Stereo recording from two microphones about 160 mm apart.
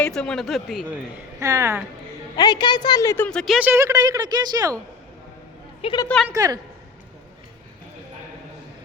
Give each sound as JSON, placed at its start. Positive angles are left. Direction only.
{"t": 0.0, "sound": "speech", "side_deg": 5}
{"t": 1.4, "sound": "a woman's voice", "side_deg": -20}
{"t": 2.3, "sound": "a woman's voice", "side_deg": 25}
{"t": 3.2, "sound": "speech", "side_deg": 0}
{"t": 3.7, "sound": "a woman's voice", "side_deg": -15}
{"t": 5.8, "sound": "a woman's voice", "side_deg": 35}
{"t": 6.3, "sound": "a woman's voice", "side_deg": -25}